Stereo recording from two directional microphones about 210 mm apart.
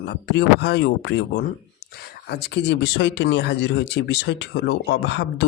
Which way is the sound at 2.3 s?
55° left (ahead or behind).